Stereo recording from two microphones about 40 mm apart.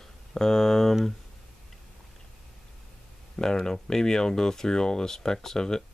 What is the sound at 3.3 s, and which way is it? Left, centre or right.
Speech, centre.